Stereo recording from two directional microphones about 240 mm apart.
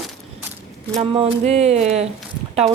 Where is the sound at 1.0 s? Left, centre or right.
Right.